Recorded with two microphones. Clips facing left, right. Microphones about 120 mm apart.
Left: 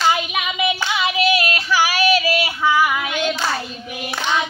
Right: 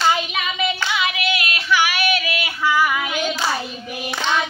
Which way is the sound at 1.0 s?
30° left (ahead or behind).